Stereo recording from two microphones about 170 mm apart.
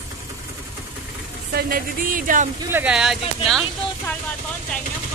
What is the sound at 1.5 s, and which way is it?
Speech, 60° right (ahead or behind).